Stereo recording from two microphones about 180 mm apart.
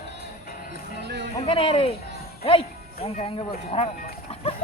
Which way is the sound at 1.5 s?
30° left (ahead or behind).